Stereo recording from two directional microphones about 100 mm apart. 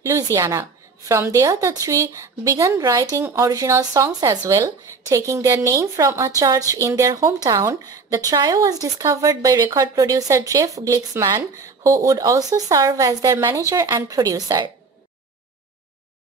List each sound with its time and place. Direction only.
0.1 s a woman's voice: 30° right (ahead or behind)